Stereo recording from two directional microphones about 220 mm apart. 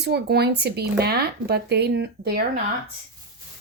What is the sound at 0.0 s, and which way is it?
Speech, 50° right (ahead or behind).